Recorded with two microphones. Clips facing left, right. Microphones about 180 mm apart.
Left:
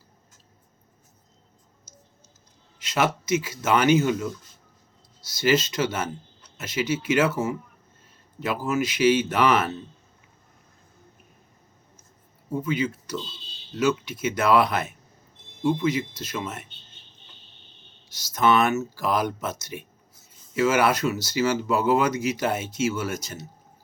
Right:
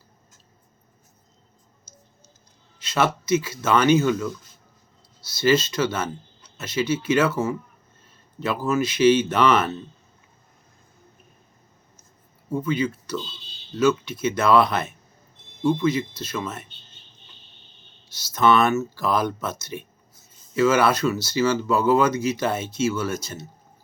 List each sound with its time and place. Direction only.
2.7 s speech: 15° left (ahead or behind)
8.6 s speech: 15° left (ahead or behind)
12.6 s speech: 15° left (ahead or behind)
18.2 s speech: 15° left (ahead or behind)